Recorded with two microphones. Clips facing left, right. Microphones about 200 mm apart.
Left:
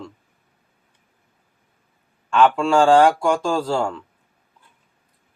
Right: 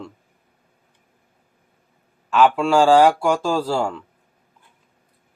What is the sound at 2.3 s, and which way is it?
Speech, 5° right (ahead or behind).